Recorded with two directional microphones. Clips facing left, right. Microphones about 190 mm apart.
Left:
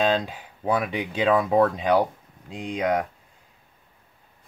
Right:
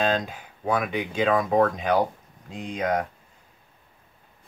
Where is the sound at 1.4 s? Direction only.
30° left (ahead or behind).